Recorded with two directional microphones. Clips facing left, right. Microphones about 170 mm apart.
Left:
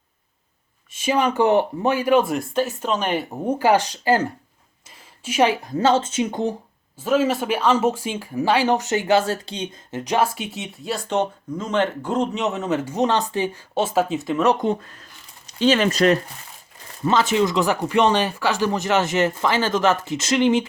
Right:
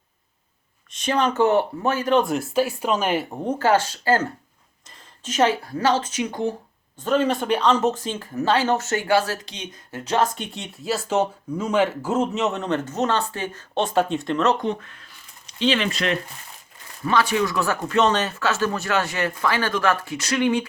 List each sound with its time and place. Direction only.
0.9 s speech: 10° left (ahead or behind); by 6.5 s 25° left (ahead or behind)
7.0 s speech: 5° left (ahead or behind); by 10.0 s 30° left (ahead or behind)
10.0 s speech: 10° left (ahead or behind)
14.6 s speech: 30° left (ahead or behind)
17.0 s speech: 25° left (ahead or behind)